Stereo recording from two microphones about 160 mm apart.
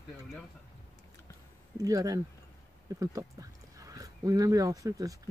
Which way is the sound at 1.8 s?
25° right (ahead or behind).